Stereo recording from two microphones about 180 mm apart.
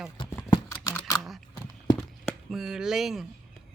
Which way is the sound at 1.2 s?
Centre (ahead or behind).